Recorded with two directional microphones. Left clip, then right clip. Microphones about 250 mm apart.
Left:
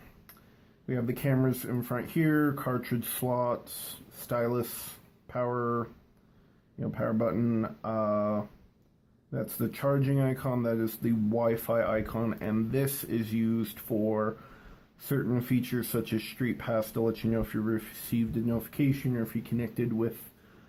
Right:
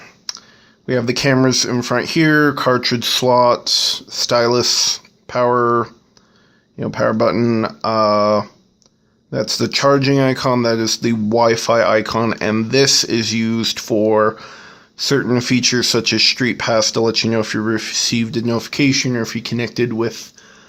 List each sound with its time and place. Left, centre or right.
0.9 s speech: right